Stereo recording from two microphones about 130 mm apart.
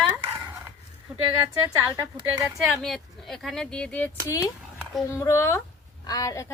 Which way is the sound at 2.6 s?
Centre (ahead or behind).